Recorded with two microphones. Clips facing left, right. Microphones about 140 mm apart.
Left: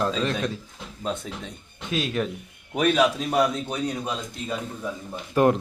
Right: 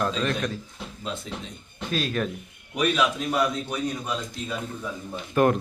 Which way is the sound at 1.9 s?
20° left (ahead or behind).